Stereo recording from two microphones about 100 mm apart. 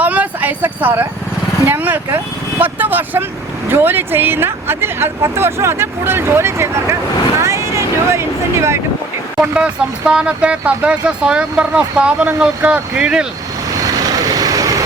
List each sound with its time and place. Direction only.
0.0 s a sound: 15° right (ahead or behind)
1.6 s speech: 20° right (ahead or behind)
9.4 s speech: 10° right (ahead or behind)
13.7 s vehicle: 35° right (ahead or behind)